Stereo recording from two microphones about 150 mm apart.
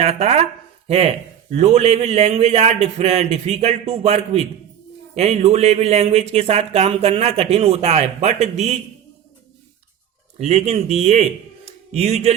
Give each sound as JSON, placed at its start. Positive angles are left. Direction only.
{"t": 0.0, "sound": "speech", "side_deg": -45}
{"t": 10.3, "sound": "a man's voice", "side_deg": -45}